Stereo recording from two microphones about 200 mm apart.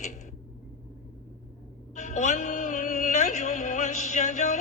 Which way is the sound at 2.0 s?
35° left (ahead or behind).